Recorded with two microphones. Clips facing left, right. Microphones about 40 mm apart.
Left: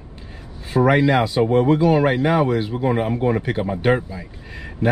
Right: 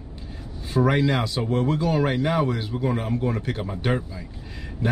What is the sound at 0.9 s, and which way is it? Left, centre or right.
A man's voice, centre.